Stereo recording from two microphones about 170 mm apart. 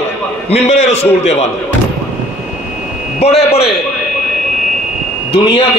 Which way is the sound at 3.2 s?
40° left (ahead or behind).